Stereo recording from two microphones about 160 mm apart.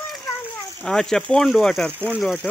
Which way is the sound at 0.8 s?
5° left (ahead or behind).